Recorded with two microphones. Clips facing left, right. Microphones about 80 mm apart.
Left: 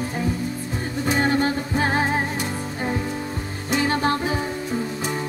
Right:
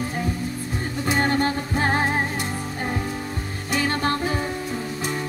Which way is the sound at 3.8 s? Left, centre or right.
Left.